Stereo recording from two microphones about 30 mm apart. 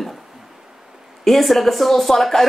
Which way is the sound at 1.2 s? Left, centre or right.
Centre.